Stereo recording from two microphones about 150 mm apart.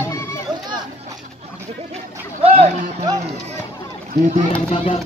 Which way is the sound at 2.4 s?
40° right (ahead or behind).